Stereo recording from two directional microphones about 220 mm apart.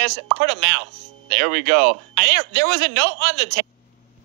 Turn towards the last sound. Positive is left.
turn(degrees=-50)  # may be behind; listen again after turning